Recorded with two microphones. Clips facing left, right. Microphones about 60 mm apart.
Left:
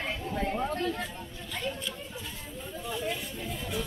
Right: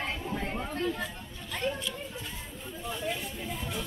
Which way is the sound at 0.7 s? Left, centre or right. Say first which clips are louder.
Even; centre.